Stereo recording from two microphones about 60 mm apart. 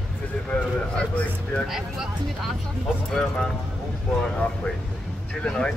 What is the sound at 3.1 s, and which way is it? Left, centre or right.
Speech, centre.